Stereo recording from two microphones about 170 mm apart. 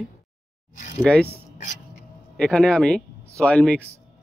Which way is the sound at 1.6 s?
45° left (ahead or behind).